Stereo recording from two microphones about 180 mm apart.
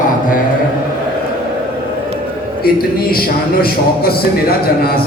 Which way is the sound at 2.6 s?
55° left (ahead or behind).